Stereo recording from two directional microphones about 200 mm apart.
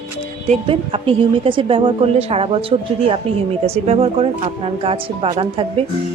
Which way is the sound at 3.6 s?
30° right (ahead or behind).